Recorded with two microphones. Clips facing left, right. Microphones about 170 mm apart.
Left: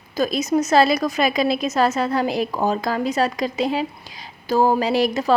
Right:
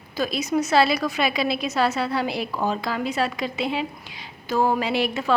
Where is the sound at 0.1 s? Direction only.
45° left (ahead or behind).